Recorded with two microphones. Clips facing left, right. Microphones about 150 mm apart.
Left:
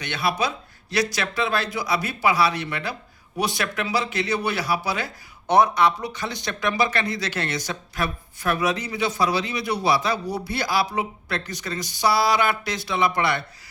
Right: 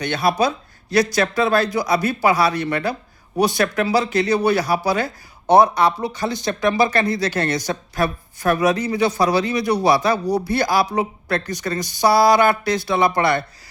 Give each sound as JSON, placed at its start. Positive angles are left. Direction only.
{"t": 0.0, "sound": "speech", "side_deg": -40}